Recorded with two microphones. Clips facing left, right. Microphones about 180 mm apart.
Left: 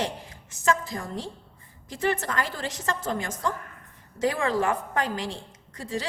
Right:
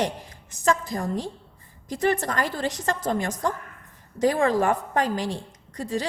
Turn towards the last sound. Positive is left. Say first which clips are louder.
# right 4 dB
turn(degrees=-35)  # may be behind; listen again after turning